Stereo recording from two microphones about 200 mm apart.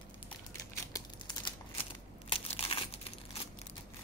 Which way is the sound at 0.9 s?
25° left (ahead or behind).